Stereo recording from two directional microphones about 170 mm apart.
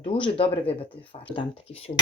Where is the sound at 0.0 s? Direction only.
35° left (ahead or behind).